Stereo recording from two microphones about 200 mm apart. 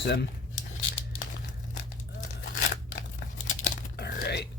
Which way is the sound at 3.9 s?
55° left (ahead or behind).